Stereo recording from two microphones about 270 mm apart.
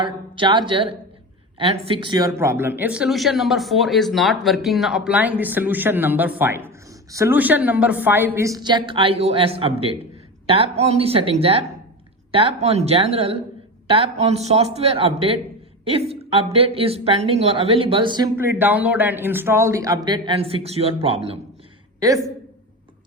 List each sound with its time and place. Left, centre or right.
0.0 s a woman's voice: centre